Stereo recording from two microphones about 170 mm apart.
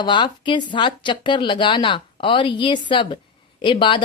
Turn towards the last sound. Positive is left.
turn(degrees=30)  # may be behind; listen again after turning